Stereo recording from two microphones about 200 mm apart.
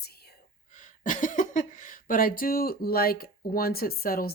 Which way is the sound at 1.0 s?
40° left (ahead or behind).